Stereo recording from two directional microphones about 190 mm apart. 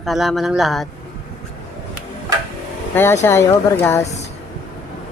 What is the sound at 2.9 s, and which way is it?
Speech, 15° left (ahead or behind).